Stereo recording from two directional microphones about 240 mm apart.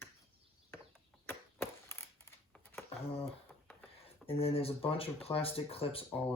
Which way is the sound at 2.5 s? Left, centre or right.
Centre.